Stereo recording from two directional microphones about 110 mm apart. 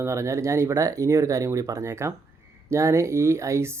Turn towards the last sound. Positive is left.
turn(degrees=-25)  # may be behind; listen again after turning